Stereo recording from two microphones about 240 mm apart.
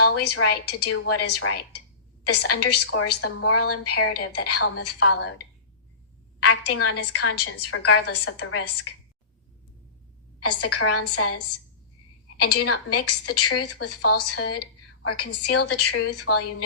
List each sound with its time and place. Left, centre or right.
0.0 s a woman's voice: left
5.0 s speech: left
6.4 s speech: left
10.4 s speech: left
12.5 s speech: left
15.7 s speech: left
16.1 s speech: left